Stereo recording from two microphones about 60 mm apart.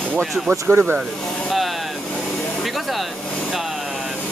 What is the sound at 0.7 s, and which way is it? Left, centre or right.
Speech, right.